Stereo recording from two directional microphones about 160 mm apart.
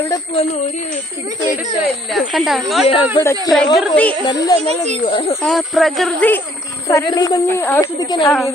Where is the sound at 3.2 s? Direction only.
25° left (ahead or behind).